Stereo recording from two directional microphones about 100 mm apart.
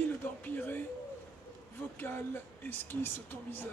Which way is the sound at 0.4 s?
20° left (ahead or behind).